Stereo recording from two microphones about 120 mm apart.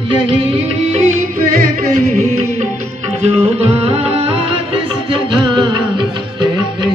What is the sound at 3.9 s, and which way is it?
Music, 55° right (ahead or behind).